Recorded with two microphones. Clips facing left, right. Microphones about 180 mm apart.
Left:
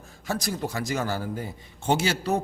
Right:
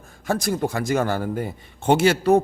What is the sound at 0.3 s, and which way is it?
Speech, 50° right (ahead or behind).